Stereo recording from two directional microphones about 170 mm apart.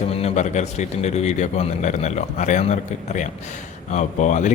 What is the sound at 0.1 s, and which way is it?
Speech, 35° left (ahead or behind).